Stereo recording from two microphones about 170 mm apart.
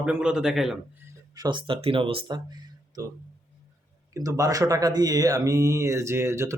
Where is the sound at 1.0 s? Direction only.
20° right (ahead or behind).